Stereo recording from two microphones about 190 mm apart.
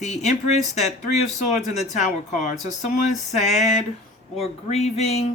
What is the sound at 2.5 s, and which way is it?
Speech, 40° left (ahead or behind).